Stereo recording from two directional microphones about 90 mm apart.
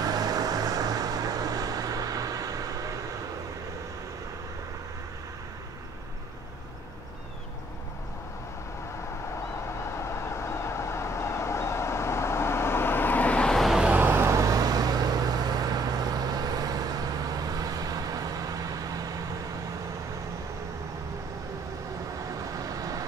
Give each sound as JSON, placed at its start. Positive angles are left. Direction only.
{"t": 0.0, "sound": "vehicle", "side_deg": -45}
{"t": 9.8, "sound": "vehicle", "side_deg": 30}
{"t": 13.8, "sound": "vehicle", "side_deg": -25}
{"t": 22.6, "sound": "vehicle", "side_deg": -40}